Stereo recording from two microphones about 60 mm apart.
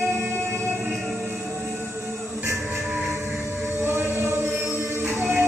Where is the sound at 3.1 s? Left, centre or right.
Right.